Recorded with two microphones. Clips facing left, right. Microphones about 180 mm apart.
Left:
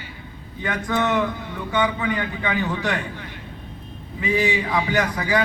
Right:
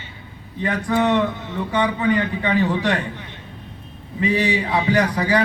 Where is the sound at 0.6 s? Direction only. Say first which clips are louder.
Right 4 dB; 35° right (ahead or behind).